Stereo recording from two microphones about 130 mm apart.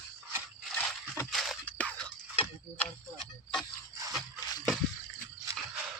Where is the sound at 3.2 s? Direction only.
Centre (ahead or behind).